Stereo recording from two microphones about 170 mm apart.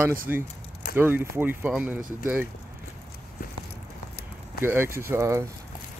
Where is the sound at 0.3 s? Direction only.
10° right (ahead or behind).